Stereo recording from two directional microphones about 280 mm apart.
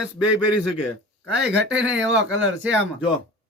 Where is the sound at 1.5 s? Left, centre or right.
Right.